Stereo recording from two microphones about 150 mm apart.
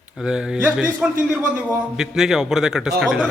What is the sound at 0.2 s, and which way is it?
Speech, 5° right (ahead or behind).